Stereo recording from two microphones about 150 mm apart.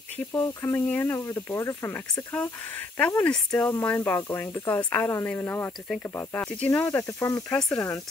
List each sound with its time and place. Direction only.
0.3 s speech: 15° left (ahead or behind)